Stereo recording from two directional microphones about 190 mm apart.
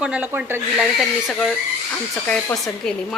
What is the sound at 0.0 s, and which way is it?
A woman's voice, 5° right (ahead or behind).